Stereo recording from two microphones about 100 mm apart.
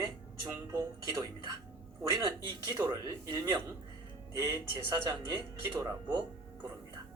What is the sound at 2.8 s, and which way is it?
Speech, 40° right (ahead or behind).